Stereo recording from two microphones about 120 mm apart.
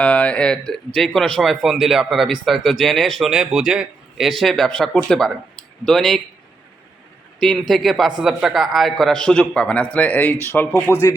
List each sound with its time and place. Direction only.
0.0 s speech: 10° left (ahead or behind)
7.3 s speech: 5° left (ahead or behind); by 11.0 s 20° left (ahead or behind)